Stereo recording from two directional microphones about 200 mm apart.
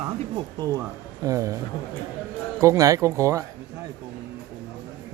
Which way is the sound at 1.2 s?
15° right (ahead or behind).